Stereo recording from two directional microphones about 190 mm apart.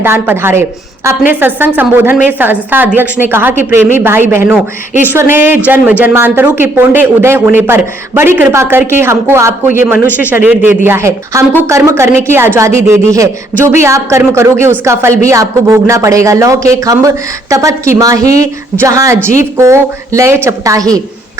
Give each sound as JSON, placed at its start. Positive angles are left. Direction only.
{"t": 0.0, "sound": "speech", "side_deg": -10}